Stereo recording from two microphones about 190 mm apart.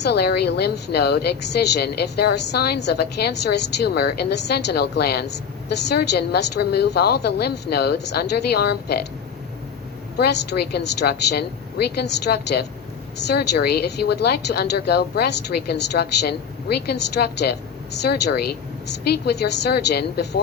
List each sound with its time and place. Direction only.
0.0 s a woman's voice: 60° left (ahead or behind)
10.2 s a woman's voice: 60° left (ahead or behind)